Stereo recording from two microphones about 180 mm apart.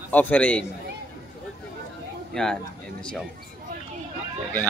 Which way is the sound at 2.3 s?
5° left (ahead or behind).